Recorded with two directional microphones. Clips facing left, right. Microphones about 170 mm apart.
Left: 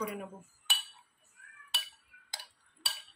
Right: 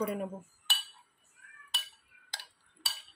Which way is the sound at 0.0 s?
40° right (ahead or behind).